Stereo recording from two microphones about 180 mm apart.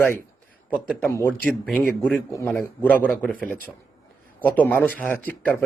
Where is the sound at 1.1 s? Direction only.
15° left (ahead or behind).